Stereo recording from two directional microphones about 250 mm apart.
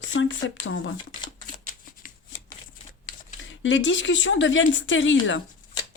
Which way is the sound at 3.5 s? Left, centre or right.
Left.